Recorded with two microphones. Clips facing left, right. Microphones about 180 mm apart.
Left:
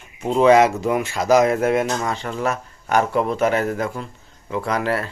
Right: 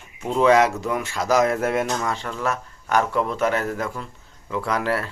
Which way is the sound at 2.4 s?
20° left (ahead or behind).